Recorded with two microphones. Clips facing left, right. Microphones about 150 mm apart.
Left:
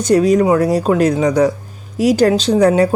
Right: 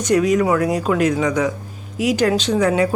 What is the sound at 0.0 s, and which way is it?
Speech, 35° left (ahead or behind).